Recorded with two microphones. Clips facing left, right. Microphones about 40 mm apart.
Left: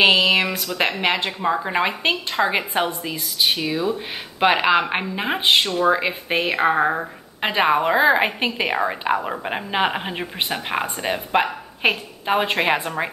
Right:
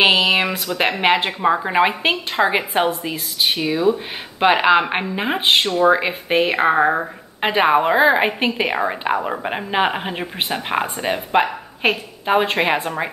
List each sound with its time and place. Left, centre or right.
0.1 s a woman's voice: centre